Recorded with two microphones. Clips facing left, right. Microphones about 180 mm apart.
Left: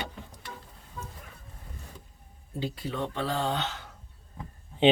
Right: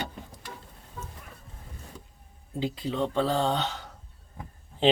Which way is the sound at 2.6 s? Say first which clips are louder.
Right 4 dB; 20° right (ahead or behind).